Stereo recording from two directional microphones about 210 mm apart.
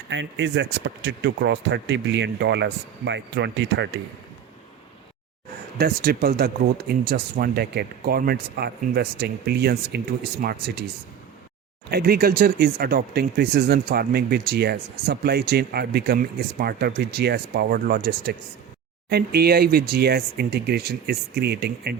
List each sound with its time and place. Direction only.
0.1 s speech: 60° right (ahead or behind)
5.7 s speech: 45° right (ahead or behind)
11.9 s speech: 45° right (ahead or behind)